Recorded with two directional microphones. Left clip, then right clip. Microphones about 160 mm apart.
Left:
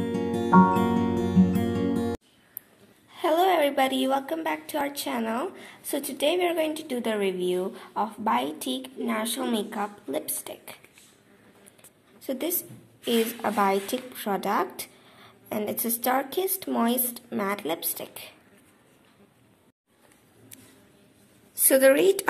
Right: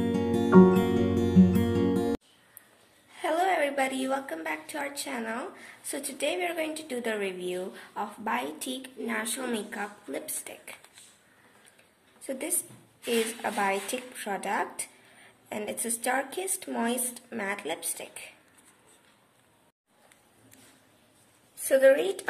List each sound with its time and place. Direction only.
0.0 s music: centre (ahead or behind)
3.2 s a woman's voice: 25° left (ahead or behind)
12.3 s a woman's voice: 20° left (ahead or behind)
21.6 s a woman's voice: 40° left (ahead or behind)